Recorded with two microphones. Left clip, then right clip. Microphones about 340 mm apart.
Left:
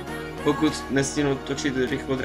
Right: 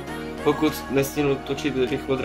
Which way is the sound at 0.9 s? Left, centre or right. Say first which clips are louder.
Right 2 dB; right.